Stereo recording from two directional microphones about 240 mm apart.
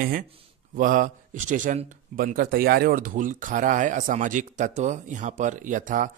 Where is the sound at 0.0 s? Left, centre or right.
Right.